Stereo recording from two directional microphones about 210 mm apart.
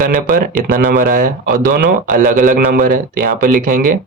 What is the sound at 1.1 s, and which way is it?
Speech, 40° right (ahead or behind).